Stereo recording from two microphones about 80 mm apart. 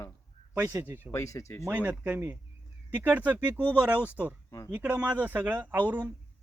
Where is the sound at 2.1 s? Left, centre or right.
Right.